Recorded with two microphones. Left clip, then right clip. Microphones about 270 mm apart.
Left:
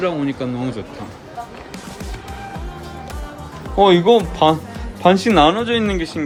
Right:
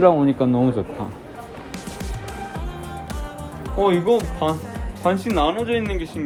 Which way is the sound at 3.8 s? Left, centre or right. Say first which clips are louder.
Left 6 dB; left.